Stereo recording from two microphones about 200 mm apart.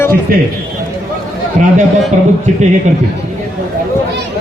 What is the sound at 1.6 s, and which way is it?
Speech, 40° right (ahead or behind).